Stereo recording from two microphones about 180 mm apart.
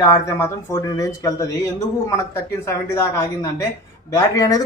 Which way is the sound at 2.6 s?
15° left (ahead or behind).